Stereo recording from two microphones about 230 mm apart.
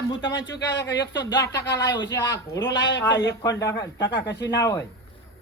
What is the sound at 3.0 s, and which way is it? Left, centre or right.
Speech, centre.